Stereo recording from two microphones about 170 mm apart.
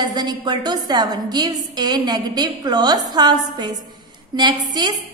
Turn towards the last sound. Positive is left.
turn(degrees=-25)  # may be behind; listen again after turning